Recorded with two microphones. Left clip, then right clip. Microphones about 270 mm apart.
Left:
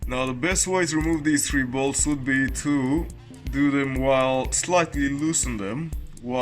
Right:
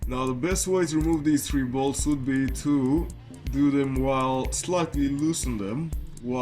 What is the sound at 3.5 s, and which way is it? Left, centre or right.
Music, centre.